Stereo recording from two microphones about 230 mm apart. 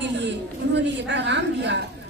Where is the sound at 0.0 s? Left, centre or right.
Right.